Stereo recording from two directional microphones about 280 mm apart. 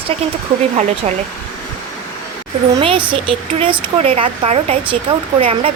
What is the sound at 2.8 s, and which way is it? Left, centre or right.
Speech, centre.